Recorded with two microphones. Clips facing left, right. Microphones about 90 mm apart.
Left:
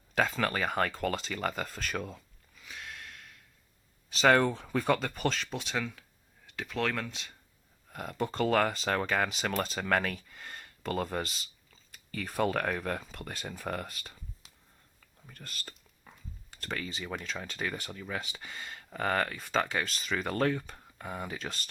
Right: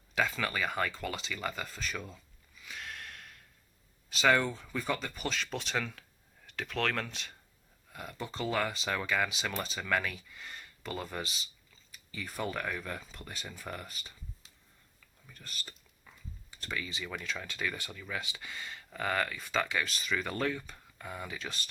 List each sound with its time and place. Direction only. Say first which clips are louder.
0.1 s speech: left 3 dB; 40° left (ahead or behind)
2.6 s sniff: right 1 dB; 20° left (ahead or behind)
4.3 s speech: left 3 dB; 50° left (ahead or behind)
5.7 s speech: left 1 dB; 5° left (ahead or behind)
6.6 s speech: left 1 dB; 15° left (ahead or behind)
7.9 s speech: left 7 dB; 50° left (ahead or behind)
15.3 s speech: left 1 dB; 50° left (ahead or behind)